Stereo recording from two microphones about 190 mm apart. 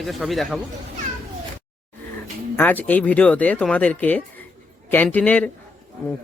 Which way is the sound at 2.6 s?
10° left (ahead or behind).